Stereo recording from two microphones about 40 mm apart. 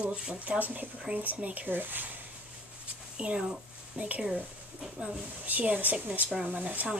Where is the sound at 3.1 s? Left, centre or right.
Right.